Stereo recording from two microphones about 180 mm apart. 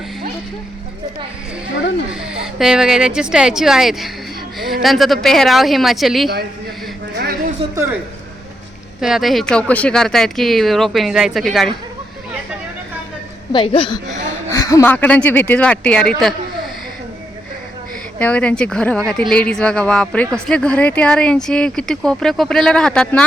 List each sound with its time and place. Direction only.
2.2 s speech: 5° right (ahead or behind)
7.2 s a sound: 55° right (ahead or behind)
9.0 s speech: centre (ahead or behind)
13.5 s a woman's voice: 30° left (ahead or behind)
14.5 s speech: 20° left (ahead or behind)
18.2 s speech: 10° left (ahead or behind)